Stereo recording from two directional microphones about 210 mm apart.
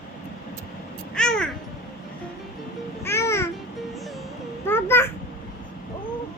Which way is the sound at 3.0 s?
10° left (ahead or behind).